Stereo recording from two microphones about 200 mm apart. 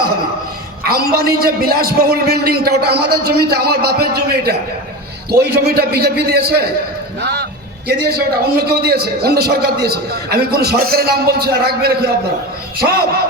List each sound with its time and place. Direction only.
0.9 s a man's voice: 50° right (ahead or behind)